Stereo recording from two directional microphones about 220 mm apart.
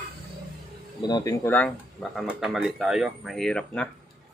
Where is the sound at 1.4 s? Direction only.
5° left (ahead or behind).